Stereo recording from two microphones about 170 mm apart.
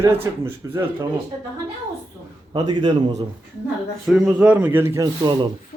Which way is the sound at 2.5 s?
25° right (ahead or behind).